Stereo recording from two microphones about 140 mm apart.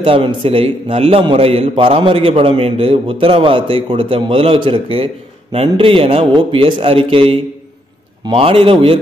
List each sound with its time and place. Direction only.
0.0 s a man's voice: 40° right (ahead or behind)